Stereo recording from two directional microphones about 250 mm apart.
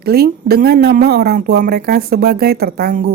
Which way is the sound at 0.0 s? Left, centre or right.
Right.